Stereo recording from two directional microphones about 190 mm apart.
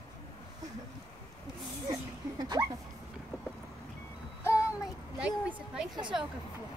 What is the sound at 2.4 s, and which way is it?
Speech, 20° right (ahead or behind).